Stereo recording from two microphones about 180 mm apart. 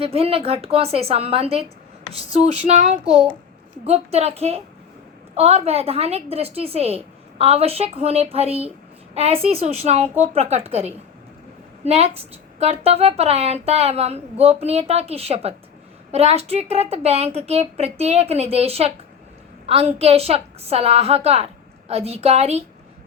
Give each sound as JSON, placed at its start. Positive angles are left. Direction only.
{"t": 0.0, "sound": "a woman's voice", "side_deg": -30}